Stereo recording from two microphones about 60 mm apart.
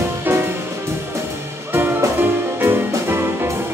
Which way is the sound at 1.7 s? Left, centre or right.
Right.